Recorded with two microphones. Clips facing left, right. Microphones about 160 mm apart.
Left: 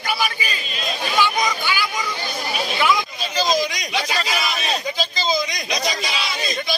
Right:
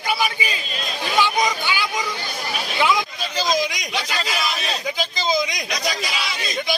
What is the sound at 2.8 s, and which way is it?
Hubbub, 20° right (ahead or behind).